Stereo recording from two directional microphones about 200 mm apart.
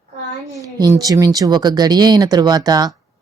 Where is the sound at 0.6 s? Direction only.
15° right (ahead or behind).